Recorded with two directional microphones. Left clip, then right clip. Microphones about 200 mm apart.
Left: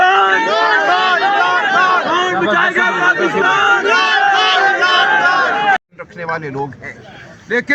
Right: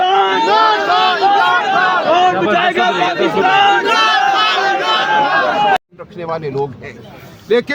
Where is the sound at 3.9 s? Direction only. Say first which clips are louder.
Even; 55° right (ahead or behind).